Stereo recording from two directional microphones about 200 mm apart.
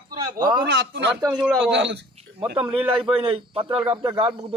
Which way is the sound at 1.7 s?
60° right (ahead or behind).